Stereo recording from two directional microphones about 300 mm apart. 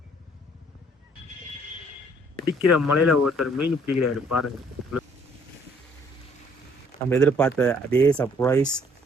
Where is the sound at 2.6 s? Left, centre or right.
Left.